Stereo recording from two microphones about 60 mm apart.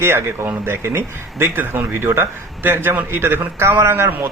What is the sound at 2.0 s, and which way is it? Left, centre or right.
Speech, right.